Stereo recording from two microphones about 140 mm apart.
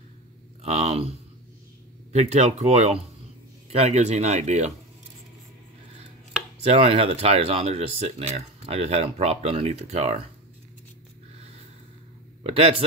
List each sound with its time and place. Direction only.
0.6 s a sound: 50° right (ahead or behind)
2.1 s speech: 50° right (ahead or behind)
6.6 s speech: 45° right (ahead or behind)
12.4 s speech: 45° right (ahead or behind)